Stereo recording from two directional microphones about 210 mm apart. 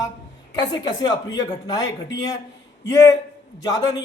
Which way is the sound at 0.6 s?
20° left (ahead or behind).